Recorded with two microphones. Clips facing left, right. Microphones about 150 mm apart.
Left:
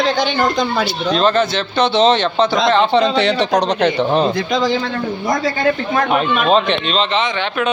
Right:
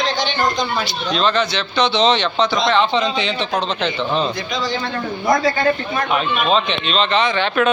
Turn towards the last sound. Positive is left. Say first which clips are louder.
# left 4 dB
turn(degrees=50)  # may be behind; listen again after turning